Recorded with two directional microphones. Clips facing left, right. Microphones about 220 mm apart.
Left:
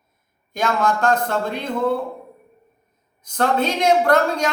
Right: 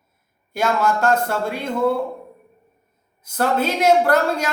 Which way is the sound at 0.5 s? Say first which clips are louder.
Right 1 dB; 10° right (ahead or behind).